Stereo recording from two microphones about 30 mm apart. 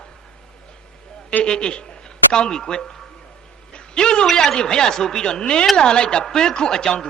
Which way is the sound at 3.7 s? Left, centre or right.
Left.